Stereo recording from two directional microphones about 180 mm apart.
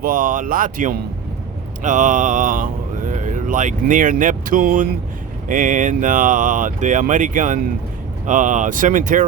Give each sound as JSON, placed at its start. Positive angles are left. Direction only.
{"t": 0.0, "sound": "speech", "side_deg": -50}